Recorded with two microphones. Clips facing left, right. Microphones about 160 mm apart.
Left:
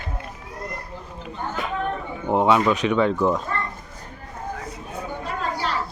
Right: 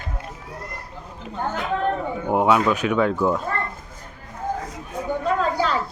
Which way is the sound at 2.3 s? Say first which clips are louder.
Even; 5° right (ahead or behind).